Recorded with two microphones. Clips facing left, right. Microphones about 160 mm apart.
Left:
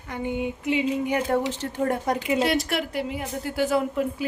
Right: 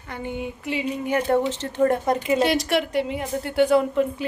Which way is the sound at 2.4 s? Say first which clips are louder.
Right 3 dB; centre (ahead or behind).